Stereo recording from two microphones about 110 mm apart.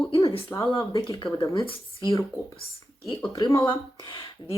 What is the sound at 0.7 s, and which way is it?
Speech, 50° left (ahead or behind).